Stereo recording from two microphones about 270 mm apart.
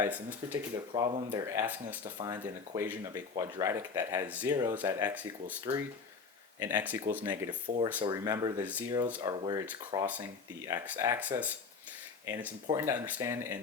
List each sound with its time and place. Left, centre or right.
0.0 s speech: centre
1.1 s speech: centre
6.6 s speech: centre